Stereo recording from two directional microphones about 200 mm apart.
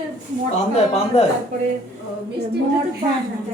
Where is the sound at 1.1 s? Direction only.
30° left (ahead or behind).